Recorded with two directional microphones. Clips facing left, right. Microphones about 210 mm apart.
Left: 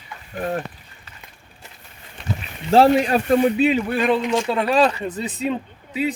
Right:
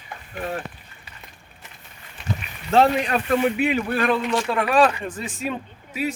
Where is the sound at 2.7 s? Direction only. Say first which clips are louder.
Left 4 dB; 30° left (ahead or behind).